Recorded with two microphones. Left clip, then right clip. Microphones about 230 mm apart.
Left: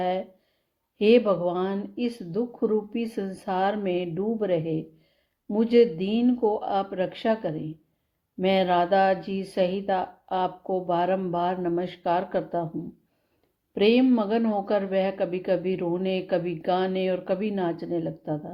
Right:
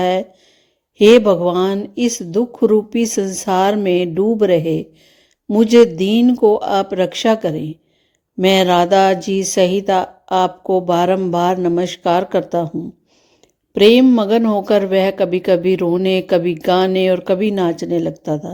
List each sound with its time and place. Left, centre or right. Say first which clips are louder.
0.0 s speech: right 10 dB; right
13.7 s speech: right 11 dB; right